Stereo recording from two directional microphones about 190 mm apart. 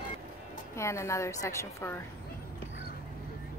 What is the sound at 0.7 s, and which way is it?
Speech, 15° left (ahead or behind).